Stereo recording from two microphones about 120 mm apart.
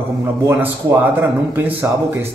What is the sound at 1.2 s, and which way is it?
Speech, 15° right (ahead or behind).